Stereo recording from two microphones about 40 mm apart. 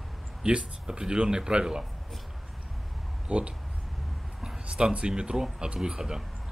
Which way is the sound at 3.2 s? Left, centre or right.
Right.